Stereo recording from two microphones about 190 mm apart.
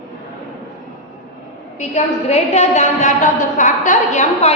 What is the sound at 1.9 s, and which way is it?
A woman's voice, 35° left (ahead or behind).